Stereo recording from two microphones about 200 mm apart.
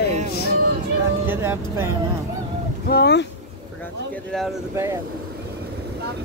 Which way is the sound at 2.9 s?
55° left (ahead or behind).